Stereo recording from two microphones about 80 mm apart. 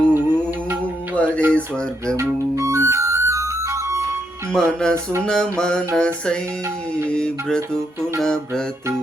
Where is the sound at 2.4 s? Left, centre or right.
Right.